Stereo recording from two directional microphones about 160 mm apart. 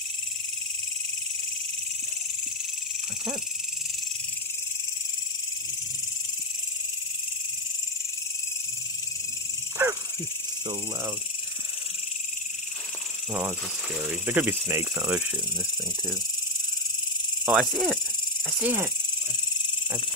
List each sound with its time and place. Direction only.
9.8 s dog: 15° right (ahead or behind)
13.3 s speech: 15° right (ahead or behind)
17.5 s cricket: centre (ahead or behind)
18.6 s speech: 10° right (ahead or behind)